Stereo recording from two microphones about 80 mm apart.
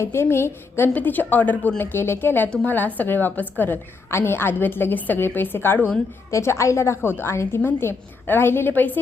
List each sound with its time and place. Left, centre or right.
0.0 s a woman's voice: left
6.3 s a woman's voice: left